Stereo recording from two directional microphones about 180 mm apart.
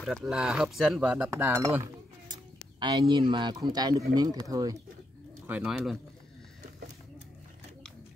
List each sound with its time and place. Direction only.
0.0 s speech: 5° right (ahead or behind); by 4.7 s 20° right (ahead or behind)
5.5 s speech: 5° right (ahead or behind)